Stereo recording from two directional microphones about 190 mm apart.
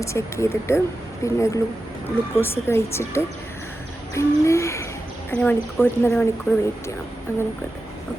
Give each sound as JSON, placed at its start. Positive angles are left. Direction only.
{"t": 0.0, "sound": "a woman's voice", "side_deg": 15}
{"t": 4.1, "sound": "a sound", "side_deg": 15}
{"t": 5.3, "sound": "a woman's voice", "side_deg": 10}